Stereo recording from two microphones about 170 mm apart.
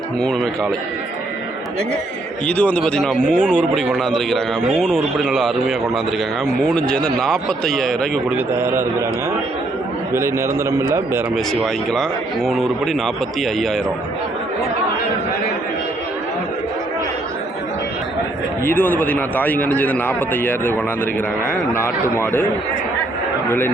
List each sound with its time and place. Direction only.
0.2 s a man's voice: centre (ahead or behind)
2.5 s a man's voice: 10° left (ahead or behind)
8.5 s a man's voice: 15° right (ahead or behind)
10.2 s a man's voice: 15° right (ahead or behind)
11.6 s a man's voice: centre (ahead or behind)
18.6 s a man's voice: 10° left (ahead or behind)
22.2 s a man's voice: 15° left (ahead or behind)
23.5 s a man's voice: 10° left (ahead or behind)